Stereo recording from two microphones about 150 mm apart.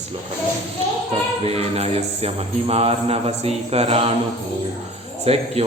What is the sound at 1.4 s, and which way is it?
Mantra, 45° right (ahead or behind).